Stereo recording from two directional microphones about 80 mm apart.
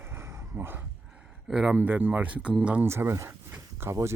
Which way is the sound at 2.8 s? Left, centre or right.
Right.